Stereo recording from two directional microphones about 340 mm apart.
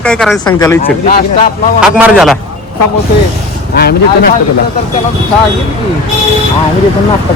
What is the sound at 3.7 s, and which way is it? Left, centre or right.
Speech, left.